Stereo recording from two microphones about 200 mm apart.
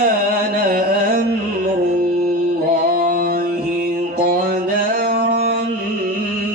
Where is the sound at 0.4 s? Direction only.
45° right (ahead or behind).